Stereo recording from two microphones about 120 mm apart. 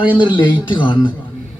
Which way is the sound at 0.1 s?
45° left (ahead or behind).